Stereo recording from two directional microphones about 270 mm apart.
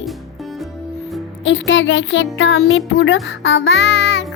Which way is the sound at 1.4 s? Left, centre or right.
Left.